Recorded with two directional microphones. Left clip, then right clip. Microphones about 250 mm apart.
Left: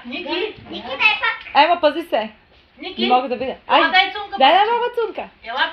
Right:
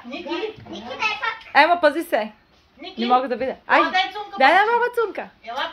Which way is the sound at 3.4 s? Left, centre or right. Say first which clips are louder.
Left 2 dB; centre.